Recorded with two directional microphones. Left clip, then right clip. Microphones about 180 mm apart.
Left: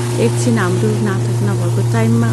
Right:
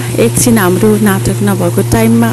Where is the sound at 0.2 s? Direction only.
40° right (ahead or behind).